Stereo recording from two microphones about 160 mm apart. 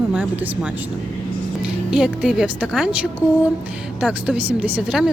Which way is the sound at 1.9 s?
5° right (ahead or behind).